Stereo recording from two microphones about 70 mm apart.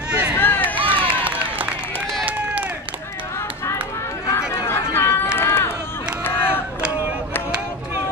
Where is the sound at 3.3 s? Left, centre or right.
Left.